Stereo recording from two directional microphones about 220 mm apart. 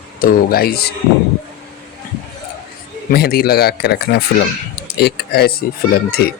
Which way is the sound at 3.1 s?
45° left (ahead or behind).